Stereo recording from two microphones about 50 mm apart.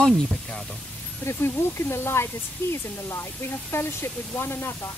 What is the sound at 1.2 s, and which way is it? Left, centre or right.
Speech, left.